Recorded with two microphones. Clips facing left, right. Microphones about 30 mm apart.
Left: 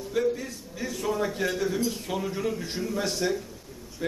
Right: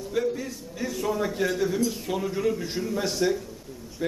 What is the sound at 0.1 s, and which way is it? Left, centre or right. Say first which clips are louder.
A man's voice: left 1 dB; centre.